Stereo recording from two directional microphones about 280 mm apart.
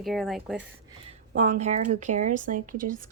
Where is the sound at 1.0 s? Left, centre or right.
Right.